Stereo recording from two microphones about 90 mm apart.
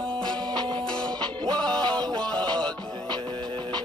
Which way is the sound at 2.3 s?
55° right (ahead or behind).